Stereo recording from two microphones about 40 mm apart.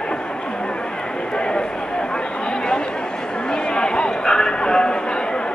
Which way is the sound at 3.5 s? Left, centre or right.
Left.